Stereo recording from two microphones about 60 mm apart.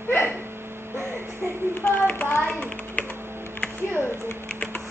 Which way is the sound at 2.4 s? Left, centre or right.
Left.